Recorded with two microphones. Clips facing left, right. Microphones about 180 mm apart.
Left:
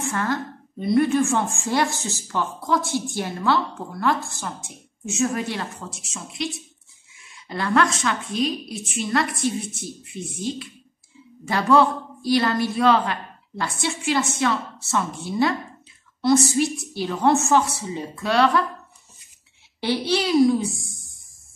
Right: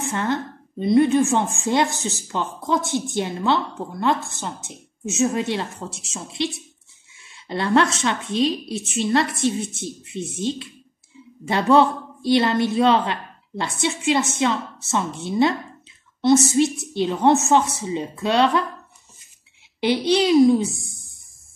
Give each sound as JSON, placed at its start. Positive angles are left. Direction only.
{"t": 0.0, "sound": "a woman's voice", "side_deg": -20}
{"t": 19.8, "sound": "a woman's voice", "side_deg": -20}